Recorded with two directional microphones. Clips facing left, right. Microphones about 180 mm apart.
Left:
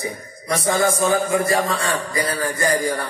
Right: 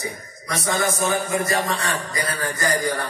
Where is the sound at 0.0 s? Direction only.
30° left (ahead or behind).